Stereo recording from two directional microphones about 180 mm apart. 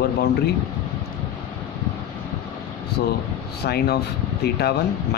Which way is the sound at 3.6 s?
65° left (ahead or behind).